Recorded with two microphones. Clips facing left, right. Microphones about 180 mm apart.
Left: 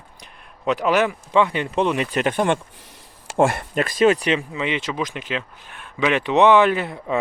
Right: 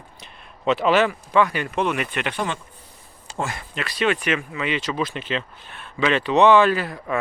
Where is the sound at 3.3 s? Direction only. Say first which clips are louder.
Left 11 dB; 65° left (ahead or behind).